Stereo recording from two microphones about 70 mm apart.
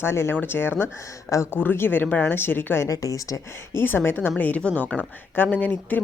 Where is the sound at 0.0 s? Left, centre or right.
Left.